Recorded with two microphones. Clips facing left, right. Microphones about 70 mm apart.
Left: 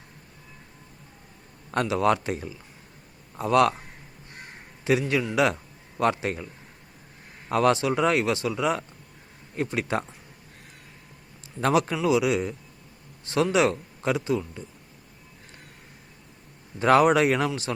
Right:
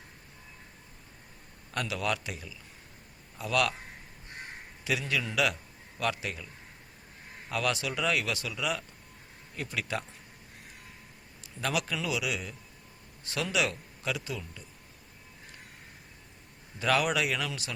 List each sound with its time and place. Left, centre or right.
1.7 s speech: left
4.8 s a man's voice: left
7.5 s a man's voice: left
11.6 s a man's voice: left
16.8 s speech: left